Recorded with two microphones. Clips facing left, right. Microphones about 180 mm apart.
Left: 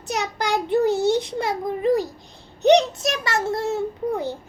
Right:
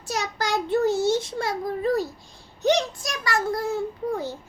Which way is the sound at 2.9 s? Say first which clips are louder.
Left 3 dB; 25° left (ahead or behind).